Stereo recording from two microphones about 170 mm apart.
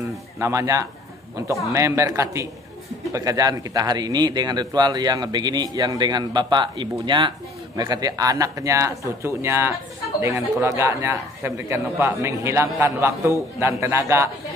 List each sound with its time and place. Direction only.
0.4 s a man's voice: 15° right (ahead or behind)